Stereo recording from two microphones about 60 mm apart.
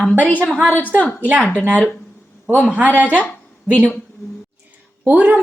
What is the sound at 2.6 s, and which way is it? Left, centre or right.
Speech, centre.